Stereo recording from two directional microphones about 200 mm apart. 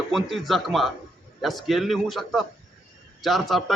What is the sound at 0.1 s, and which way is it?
Speech, centre (ahead or behind).